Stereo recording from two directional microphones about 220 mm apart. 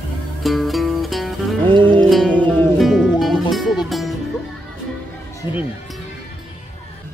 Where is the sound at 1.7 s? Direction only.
20° right (ahead or behind).